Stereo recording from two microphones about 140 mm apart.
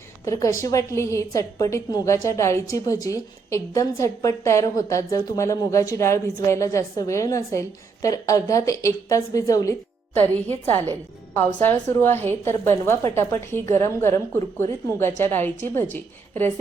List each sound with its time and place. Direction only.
0.3 s a woman's voice: 25° left (ahead or behind)
10.2 s a woman's voice: 10° left (ahead or behind)